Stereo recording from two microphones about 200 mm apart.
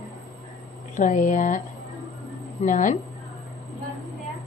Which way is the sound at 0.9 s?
40° left (ahead or behind).